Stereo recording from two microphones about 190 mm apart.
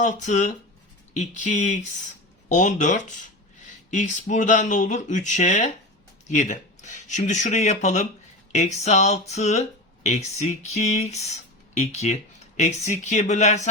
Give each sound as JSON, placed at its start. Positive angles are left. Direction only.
{"t": 0.0, "sound": "speech", "side_deg": 40}